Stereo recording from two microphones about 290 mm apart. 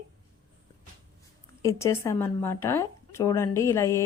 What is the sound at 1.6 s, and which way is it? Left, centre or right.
Speech, centre.